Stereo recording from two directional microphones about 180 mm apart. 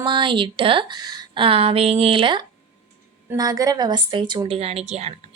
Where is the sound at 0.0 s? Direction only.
25° right (ahead or behind).